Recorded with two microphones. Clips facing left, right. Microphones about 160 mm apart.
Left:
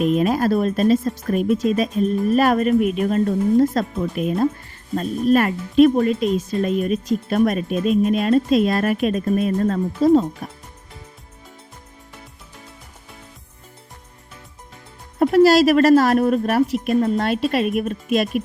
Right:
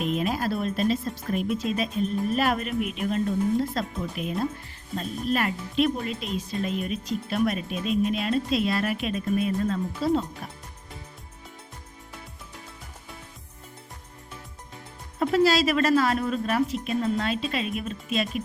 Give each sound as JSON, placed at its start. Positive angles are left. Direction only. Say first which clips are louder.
{"t": 0.0, "sound": "speech", "louder": "left 8 dB", "side_deg": 45}
{"t": 15.2, "sound": "music", "louder": "left 7 dB", "side_deg": 60}
{"t": 15.7, "sound": "speech", "louder": "left 8 dB", "side_deg": 40}
{"t": 16.2, "sound": "speech", "louder": "left 7 dB", "side_deg": 55}
{"t": 17.2, "sound": "speech", "louder": "left 8 dB", "side_deg": 65}